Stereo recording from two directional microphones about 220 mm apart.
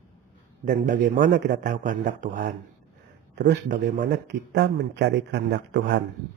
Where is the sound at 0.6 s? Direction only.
35° right (ahead or behind).